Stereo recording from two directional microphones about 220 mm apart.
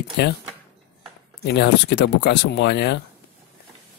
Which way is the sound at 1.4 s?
50° left (ahead or behind).